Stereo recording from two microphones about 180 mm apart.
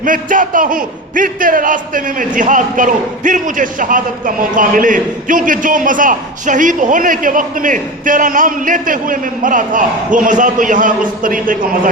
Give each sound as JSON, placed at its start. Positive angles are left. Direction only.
{"t": 0.0, "sound": "a man's voice", "side_deg": -45}